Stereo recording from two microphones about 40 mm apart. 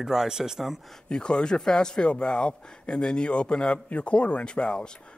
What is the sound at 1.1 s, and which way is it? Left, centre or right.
Speech, left.